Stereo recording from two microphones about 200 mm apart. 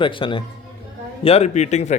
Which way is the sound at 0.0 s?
25° left (ahead or behind).